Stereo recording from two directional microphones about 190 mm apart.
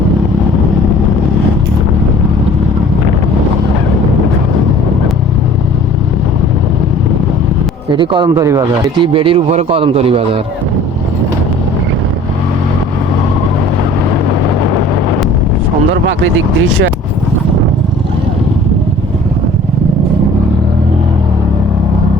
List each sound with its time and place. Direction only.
7.9 s speech: 25° right (ahead or behind)